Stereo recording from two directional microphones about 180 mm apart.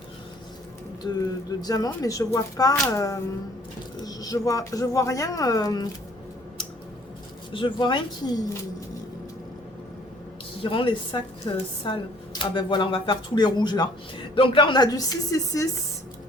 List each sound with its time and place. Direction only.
1.0 s speech: 20° left (ahead or behind)
7.5 s speech: 25° left (ahead or behind)
10.6 s speech: 30° left (ahead or behind)